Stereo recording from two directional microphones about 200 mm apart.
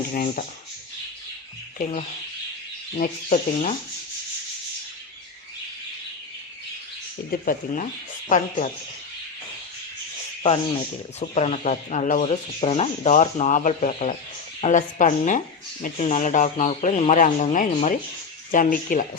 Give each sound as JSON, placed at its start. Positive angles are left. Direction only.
{"t": 0.1, "sound": "speech", "side_deg": 40}
{"t": 1.8, "sound": "speech", "side_deg": 35}
{"t": 2.9, "sound": "rub", "side_deg": 45}
{"t": 7.3, "sound": "speech", "side_deg": 40}
{"t": 11.2, "sound": "speech", "side_deg": 35}